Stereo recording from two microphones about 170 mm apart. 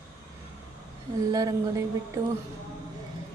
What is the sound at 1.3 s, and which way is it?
Speech, 20° right (ahead or behind).